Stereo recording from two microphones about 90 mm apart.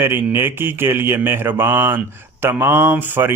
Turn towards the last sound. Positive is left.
turn(degrees=-20)  # may be behind; listen again after turning